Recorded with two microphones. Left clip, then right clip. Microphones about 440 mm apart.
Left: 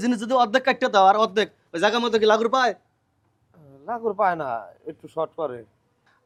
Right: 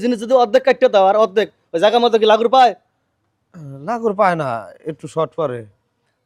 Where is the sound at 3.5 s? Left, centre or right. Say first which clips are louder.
Right 7 dB; right.